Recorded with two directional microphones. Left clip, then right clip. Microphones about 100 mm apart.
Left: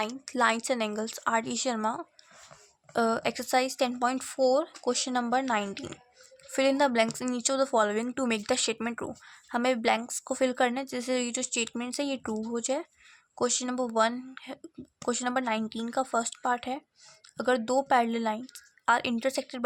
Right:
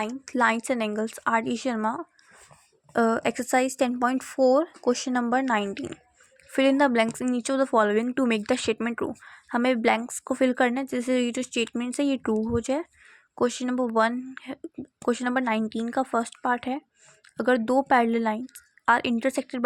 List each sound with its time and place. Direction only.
0.0 s speech: 35° right (ahead or behind)